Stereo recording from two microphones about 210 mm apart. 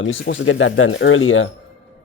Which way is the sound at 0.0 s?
60° left (ahead or behind).